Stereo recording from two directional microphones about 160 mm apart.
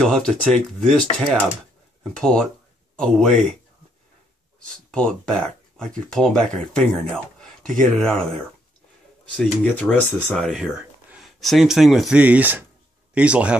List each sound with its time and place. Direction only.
0.0 s speech: 5° left (ahead or behind)
5.8 s speech: 5° left (ahead or behind)
9.4 s speech: 5° left (ahead or behind)